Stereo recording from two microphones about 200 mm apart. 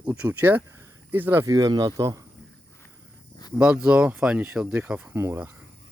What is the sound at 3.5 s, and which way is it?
Speech, 5° right (ahead or behind).